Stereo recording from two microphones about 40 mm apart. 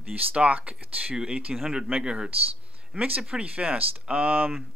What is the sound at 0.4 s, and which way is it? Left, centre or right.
Speech, right.